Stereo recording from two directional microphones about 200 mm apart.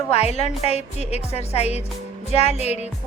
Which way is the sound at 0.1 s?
30° left (ahead or behind).